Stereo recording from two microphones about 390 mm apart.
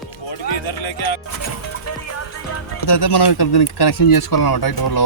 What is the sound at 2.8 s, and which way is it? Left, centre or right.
Speech, left.